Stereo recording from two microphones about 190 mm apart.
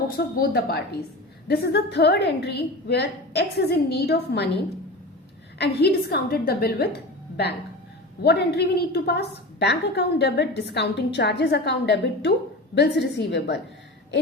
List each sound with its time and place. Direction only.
0.3 s a woman's voice: 55° left (ahead or behind)
5.5 s a woman's voice: 60° left (ahead or behind)
8.2 s a woman's voice: 60° left (ahead or behind)